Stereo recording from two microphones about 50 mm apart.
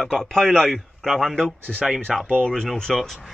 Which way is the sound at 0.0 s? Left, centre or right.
Centre.